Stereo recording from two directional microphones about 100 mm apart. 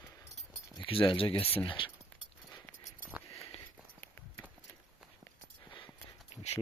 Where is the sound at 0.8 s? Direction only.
60° left (ahead or behind).